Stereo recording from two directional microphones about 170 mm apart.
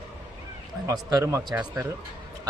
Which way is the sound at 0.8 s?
20° right (ahead or behind).